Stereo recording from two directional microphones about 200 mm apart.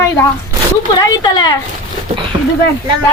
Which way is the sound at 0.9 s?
20° left (ahead or behind).